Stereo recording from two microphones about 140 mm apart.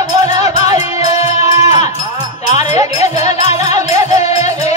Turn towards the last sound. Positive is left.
turn(degrees=-25)  # may be behind; listen again after turning